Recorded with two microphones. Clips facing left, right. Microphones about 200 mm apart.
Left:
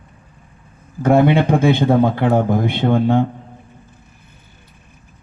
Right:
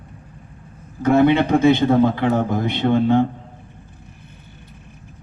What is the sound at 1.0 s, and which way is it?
A man's voice, 50° left (ahead or behind).